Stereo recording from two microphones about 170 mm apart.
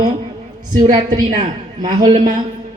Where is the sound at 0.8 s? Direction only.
45° right (ahead or behind).